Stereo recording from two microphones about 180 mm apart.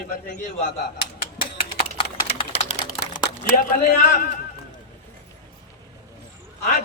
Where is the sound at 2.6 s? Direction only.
35° left (ahead or behind).